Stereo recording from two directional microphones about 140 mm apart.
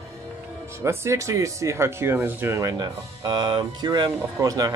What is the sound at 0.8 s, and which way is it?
Speech, 20° right (ahead or behind).